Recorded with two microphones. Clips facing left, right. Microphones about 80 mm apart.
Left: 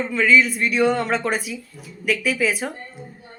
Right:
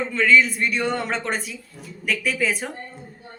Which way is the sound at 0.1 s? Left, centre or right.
Centre.